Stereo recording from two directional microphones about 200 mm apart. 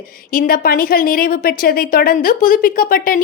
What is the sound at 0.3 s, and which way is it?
Speech, 45° left (ahead or behind).